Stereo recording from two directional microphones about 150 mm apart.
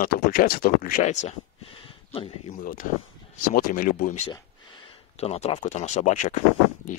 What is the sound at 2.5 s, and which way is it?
Speech, 70° left (ahead or behind).